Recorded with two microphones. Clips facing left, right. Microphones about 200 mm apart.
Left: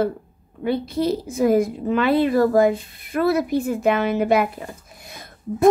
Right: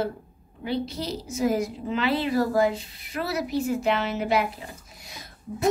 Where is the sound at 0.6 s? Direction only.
55° left (ahead or behind).